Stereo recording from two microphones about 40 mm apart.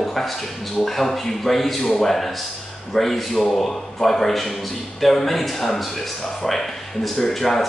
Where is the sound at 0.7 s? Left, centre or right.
Centre.